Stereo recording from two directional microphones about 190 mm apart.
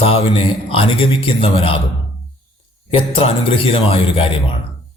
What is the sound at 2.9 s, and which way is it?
Speech, 30° left (ahead or behind).